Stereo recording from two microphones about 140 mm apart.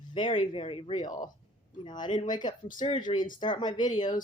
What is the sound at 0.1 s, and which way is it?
Speech, 35° left (ahead or behind).